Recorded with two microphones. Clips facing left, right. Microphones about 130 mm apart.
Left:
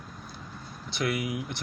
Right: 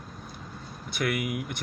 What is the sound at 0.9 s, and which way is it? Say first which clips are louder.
Speech: right 1 dB; 55° right (ahead or behind).